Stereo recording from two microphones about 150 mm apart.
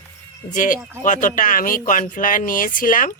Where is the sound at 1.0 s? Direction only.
60° left (ahead or behind).